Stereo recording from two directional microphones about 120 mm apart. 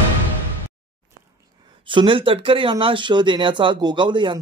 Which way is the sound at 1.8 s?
45° right (ahead or behind).